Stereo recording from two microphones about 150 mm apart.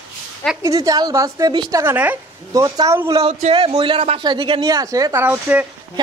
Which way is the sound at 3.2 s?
45° right (ahead or behind).